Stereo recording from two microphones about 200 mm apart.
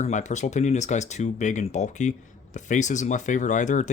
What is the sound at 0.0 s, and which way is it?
Speech, 35° left (ahead or behind).